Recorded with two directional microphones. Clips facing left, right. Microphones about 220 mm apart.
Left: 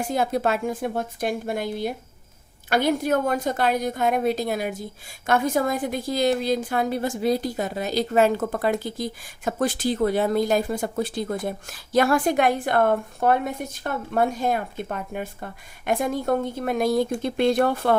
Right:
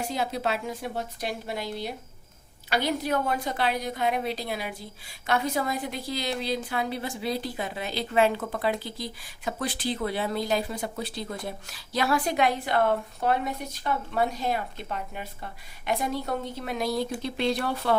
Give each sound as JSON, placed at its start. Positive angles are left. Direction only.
{"t": 0.0, "sound": "a woman's voice", "side_deg": 50}